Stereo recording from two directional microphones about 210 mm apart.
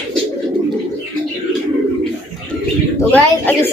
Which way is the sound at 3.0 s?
10° left (ahead or behind).